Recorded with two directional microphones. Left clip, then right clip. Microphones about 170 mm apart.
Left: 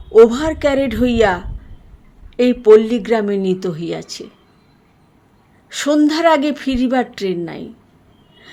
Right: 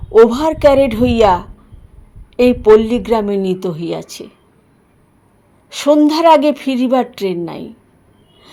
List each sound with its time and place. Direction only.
0.2 s a woman's voice: 5° right (ahead or behind)
5.7 s a woman's voice: 5° right (ahead or behind)